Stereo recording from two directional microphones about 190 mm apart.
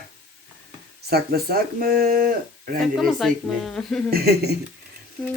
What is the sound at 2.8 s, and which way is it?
Speech, centre (ahead or behind).